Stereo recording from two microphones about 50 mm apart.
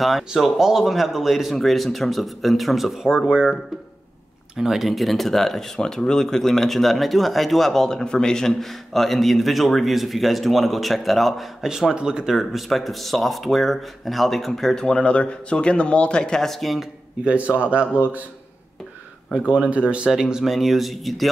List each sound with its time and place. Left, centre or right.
0.3 s speech: centre
4.6 s speech: centre
11.9 s speech: centre
15.0 s speech: left; by 16.8 s centre
17.2 s a man's voice: right
19.5 s a man's voice: right
20.1 s speech: centre
20.5 s speech: centre